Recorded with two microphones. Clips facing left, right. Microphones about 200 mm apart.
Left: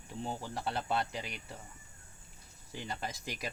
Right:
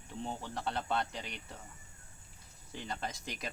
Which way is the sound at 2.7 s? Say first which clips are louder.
Even; 5° left (ahead or behind).